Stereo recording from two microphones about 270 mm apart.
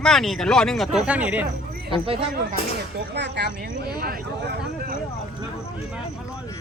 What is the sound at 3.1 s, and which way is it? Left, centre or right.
Speech, right.